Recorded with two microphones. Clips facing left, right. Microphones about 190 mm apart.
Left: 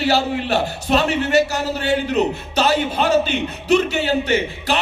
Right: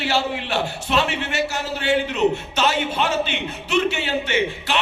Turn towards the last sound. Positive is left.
turn(degrees=40)  # may be behind; listen again after turning